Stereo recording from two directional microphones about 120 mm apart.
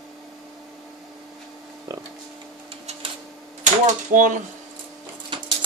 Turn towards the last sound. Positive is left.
turn(degrees=-45)  # may be behind; listen again after turning